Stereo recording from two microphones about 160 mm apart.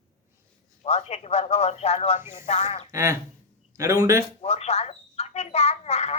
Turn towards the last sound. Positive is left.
turn(degrees=40)  # may be behind; listen again after turning